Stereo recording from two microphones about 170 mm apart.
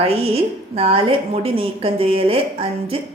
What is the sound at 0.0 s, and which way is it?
A woman's voice, 35° right (ahead or behind).